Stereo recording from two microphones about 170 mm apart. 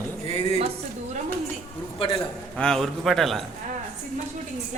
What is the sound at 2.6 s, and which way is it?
Speech, 5° left (ahead or behind).